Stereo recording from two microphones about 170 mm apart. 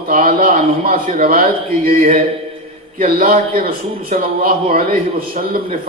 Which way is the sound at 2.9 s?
55° right (ahead or behind).